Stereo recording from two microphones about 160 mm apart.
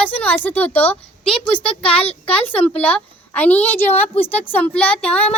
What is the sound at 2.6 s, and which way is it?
Speech, 10° left (ahead or behind).